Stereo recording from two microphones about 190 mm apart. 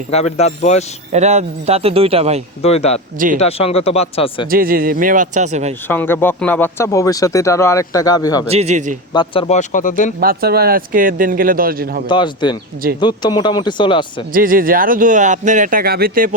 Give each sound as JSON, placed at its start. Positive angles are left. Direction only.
{"t": 0.1, "sound": "speech", "side_deg": 35}
{"t": 1.1, "sound": "speech", "side_deg": -35}
{"t": 2.6, "sound": "speech", "side_deg": 35}
{"t": 4.4, "sound": "speech", "side_deg": -50}
{"t": 5.9, "sound": "speech", "side_deg": 10}
{"t": 8.4, "sound": "speech", "side_deg": -35}
{"t": 9.1, "sound": "speech", "side_deg": 25}
{"t": 9.6, "sound": "speech", "side_deg": 45}
{"t": 10.2, "sound": "speech", "side_deg": -55}
{"t": 12.0, "sound": "speech", "side_deg": 25}
{"t": 14.3, "sound": "speech", "side_deg": -50}